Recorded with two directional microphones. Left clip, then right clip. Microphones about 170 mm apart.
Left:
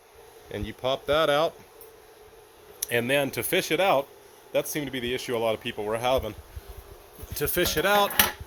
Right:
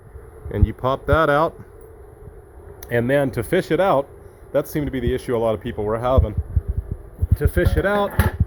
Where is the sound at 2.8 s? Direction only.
10° left (ahead or behind).